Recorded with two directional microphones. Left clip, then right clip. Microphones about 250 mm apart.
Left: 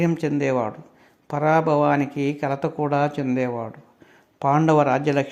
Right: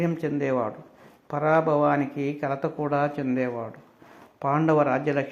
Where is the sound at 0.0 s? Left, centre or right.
Left.